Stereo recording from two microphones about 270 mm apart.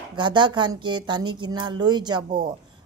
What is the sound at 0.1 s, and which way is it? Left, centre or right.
Speech, centre.